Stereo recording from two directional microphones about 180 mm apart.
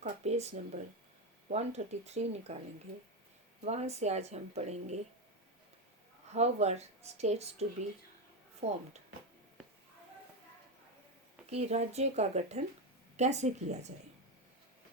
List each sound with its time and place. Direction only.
0.0 s a sound: 40° right (ahead or behind)
1.5 s speech: 40° right (ahead or behind)
3.6 s speech: 35° right (ahead or behind)
6.3 s speech: 40° right (ahead or behind)
11.5 s speech: 35° right (ahead or behind)